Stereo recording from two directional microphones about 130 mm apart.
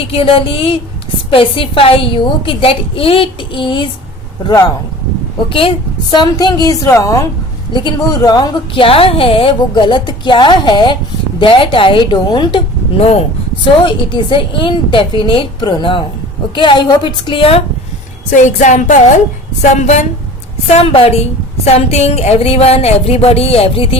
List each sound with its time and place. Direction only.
0.0 s a woman's voice: 45° left (ahead or behind)
5.5 s a woman's voice: 40° left (ahead or behind); by 7.3 s 25° left (ahead or behind)
7.7 s speech: 35° left (ahead or behind)
13.0 s a woman's voice: 55° left (ahead or behind)
13.8 s speech: 40° left (ahead or behind)
18.3 s speech: 75° left (ahead or behind)
19.6 s a woman's voice: 65° left (ahead or behind)
20.7 s a woman's voice: 50° left (ahead or behind)